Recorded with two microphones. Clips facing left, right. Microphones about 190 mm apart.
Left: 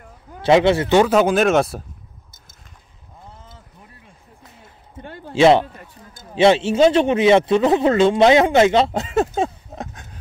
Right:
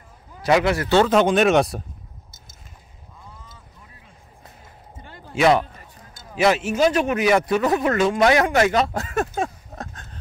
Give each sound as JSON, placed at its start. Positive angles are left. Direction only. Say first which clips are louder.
{"t": 0.4, "sound": "speech", "louder": "left 5 dB", "side_deg": 25}
{"t": 0.9, "sound": "speech", "louder": "even", "side_deg": 5}
{"t": 5.0, "sound": "a sound", "louder": "left 9 dB", "side_deg": 60}
{"t": 5.3, "sound": "a man's voice", "louder": "left 4 dB", "side_deg": 25}